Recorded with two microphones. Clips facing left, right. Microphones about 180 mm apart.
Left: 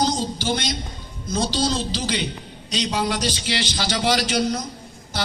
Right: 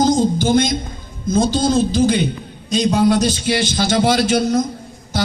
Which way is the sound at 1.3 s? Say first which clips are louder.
Right 7 dB; 50° right (ahead or behind).